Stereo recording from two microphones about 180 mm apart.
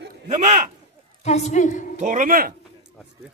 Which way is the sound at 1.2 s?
40° left (ahead or behind).